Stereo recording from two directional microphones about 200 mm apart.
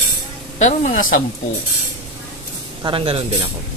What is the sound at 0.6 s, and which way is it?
Speech, 35° left (ahead or behind).